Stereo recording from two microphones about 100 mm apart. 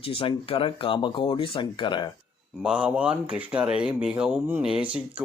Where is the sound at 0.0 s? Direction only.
65° left (ahead or behind).